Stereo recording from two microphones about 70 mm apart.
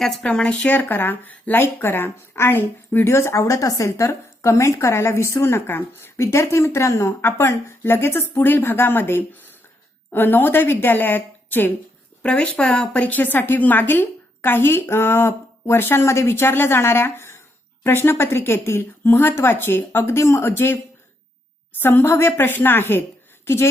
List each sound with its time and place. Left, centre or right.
0.0 s a woman's voice: centre; by 11.7 s left
12.2 s speech: centre